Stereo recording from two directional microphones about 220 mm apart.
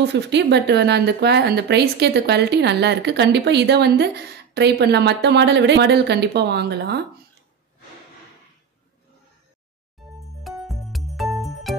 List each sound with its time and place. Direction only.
0.0 s speech: 50° right (ahead or behind)
10.4 s music: centre (ahead or behind)